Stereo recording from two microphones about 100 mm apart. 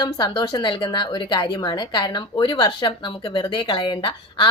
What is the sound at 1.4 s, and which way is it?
A woman's voice, 40° left (ahead or behind).